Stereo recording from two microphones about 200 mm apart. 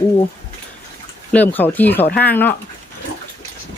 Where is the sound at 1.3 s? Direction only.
10° left (ahead or behind).